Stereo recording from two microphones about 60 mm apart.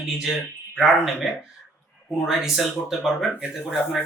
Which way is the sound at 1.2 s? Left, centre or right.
Centre.